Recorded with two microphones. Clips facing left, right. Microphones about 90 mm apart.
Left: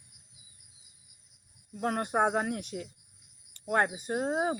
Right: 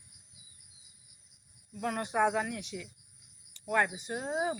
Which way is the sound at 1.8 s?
45° left (ahead or behind).